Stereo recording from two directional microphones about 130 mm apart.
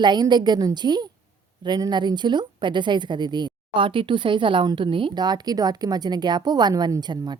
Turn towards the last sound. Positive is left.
turn(degrees=-35)  # may be behind; listen again after turning